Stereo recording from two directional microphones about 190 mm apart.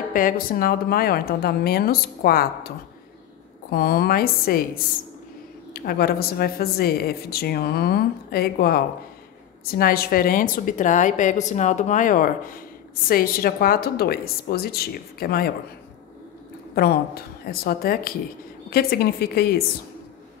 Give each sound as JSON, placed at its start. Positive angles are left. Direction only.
{"t": 0.1, "sound": "a woman's voice", "side_deg": 45}
{"t": 3.7, "sound": "a woman's voice", "side_deg": 55}
{"t": 16.7, "sound": "a woman's voice", "side_deg": 55}